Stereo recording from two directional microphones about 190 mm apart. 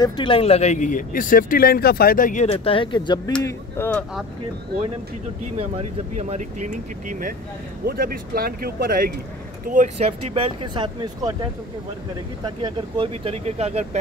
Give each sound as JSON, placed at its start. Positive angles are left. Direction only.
{"t": 0.0, "sound": "speech", "side_deg": 25}
{"t": 2.4, "sound": "speech", "side_deg": 30}
{"t": 3.4, "sound": "speech", "side_deg": 10}
{"t": 5.6, "sound": "speech", "side_deg": -35}
{"t": 9.7, "sound": "speech", "side_deg": -40}
{"t": 12.6, "sound": "speech", "side_deg": -25}